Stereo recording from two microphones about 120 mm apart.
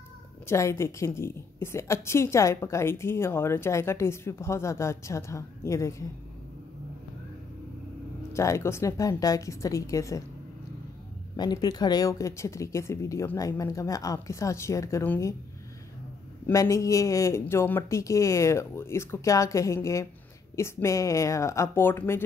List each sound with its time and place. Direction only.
0.5 s a woman's voice: 25° left (ahead or behind)
8.3 s a woman's voice: 25° left (ahead or behind)
11.3 s a woman's voice: 35° left (ahead or behind)
16.5 s a woman's voice: 25° left (ahead or behind)